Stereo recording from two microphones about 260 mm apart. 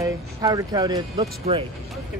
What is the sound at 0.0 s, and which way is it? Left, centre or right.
Speech, centre.